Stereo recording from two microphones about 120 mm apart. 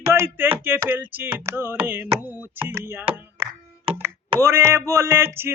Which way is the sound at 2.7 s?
20° right (ahead or behind).